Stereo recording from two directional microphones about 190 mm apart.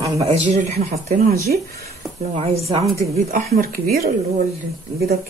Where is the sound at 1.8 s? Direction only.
35° right (ahead or behind); by 4.1 s 50° right (ahead or behind).